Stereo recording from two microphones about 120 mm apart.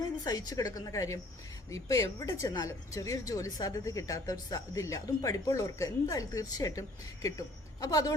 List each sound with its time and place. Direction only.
0.3 s a woman's voice: 30° left (ahead or behind)